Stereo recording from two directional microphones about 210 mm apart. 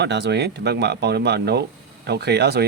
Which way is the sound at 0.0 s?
55° right (ahead or behind).